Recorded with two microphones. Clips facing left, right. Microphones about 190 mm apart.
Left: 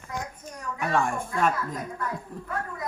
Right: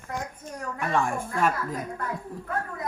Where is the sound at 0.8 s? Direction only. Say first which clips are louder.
Left 1 dB; centre (ahead or behind).